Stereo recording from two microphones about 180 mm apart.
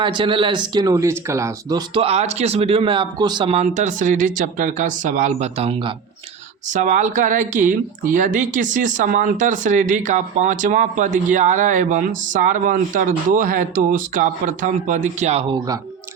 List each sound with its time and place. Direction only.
0.0 s speech: 25° right (ahead or behind)
2.0 s speech: 35° right (ahead or behind)
6.7 s speech: 45° right (ahead or behind)